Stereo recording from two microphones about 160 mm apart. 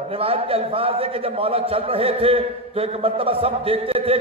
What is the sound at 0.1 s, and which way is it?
A man's voice, 35° right (ahead or behind).